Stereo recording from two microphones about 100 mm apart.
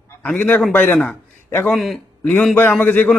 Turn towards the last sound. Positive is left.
turn(degrees=15)  # may be behind; listen again after turning